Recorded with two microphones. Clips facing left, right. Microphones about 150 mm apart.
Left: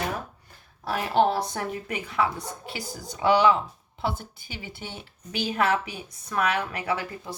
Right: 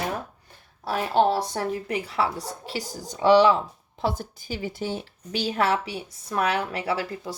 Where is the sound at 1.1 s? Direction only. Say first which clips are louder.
Right 1 dB; 30° right (ahead or behind).